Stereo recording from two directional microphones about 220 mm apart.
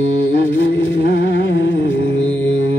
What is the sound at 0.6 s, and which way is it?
Music, 55° left (ahead or behind).